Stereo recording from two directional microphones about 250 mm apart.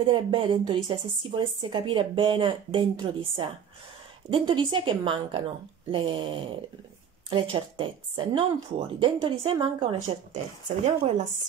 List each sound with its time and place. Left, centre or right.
0.0 s speech: centre